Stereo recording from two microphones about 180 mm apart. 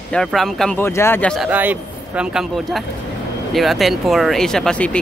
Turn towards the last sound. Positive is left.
turn(degrees=5)  # may be behind; listen again after turning